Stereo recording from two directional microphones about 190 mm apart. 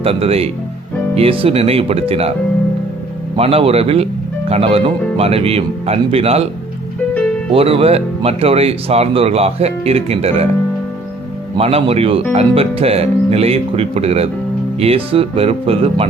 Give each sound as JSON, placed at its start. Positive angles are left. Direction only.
{"t": 0.0, "sound": "speech", "side_deg": -30}
{"t": 3.3, "sound": "speech", "side_deg": -30}
{"t": 7.5, "sound": "speech", "side_deg": -30}
{"t": 11.5, "sound": "speech", "side_deg": -30}